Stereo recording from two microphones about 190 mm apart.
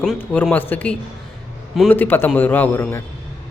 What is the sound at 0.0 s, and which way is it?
Speech, 5° left (ahead or behind).